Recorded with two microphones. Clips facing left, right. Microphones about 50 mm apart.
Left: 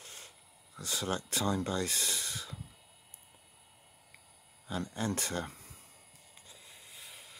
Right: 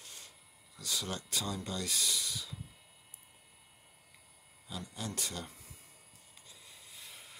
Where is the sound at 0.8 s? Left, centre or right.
Left.